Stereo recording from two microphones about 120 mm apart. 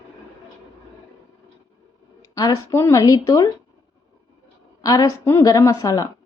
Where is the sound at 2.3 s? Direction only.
30° left (ahead or behind).